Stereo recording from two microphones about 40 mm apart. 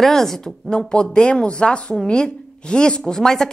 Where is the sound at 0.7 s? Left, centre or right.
Left.